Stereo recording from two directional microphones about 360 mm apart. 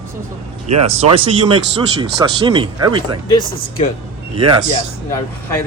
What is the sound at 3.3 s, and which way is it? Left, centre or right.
Speech, centre.